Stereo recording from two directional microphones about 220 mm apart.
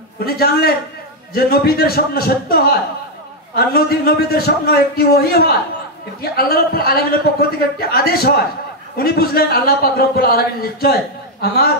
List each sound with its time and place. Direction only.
0.2 s a man's voice: 45° left (ahead or behind)